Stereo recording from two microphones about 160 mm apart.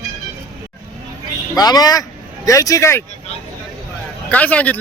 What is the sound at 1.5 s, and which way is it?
Speech, 25° left (ahead or behind).